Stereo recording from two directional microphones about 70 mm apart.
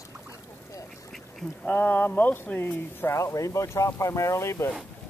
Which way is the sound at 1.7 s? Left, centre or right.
Left.